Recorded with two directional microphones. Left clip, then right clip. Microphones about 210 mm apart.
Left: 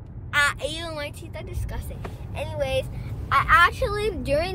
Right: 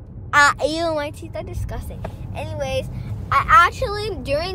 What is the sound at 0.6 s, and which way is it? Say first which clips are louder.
Speech: right 9 dB; 20° right (ahead or behind).